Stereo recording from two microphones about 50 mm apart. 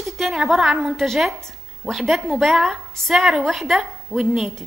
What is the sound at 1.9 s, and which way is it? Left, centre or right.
A woman's voice, centre.